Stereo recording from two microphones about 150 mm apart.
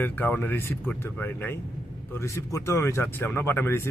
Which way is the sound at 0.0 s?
10° left (ahead or behind).